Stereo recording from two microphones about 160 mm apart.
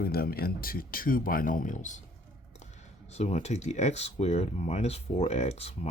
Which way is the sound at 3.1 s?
45° left (ahead or behind).